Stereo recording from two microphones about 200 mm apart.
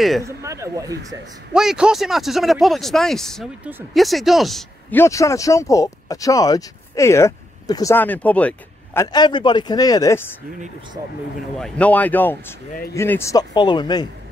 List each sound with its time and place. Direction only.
0.2 s speech: 15° right (ahead or behind)
1.5 s speech: 5° right (ahead or behind)
4.9 s speech: 15° left (ahead or behind)
11.5 s speech: 5° left (ahead or behind); by 14.0 s 20° left (ahead or behind)